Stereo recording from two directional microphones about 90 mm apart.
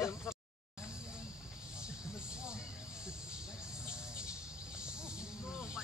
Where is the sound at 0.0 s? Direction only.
25° left (ahead or behind).